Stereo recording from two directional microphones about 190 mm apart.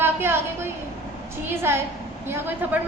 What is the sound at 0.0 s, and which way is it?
A woman's voice, 10° right (ahead or behind).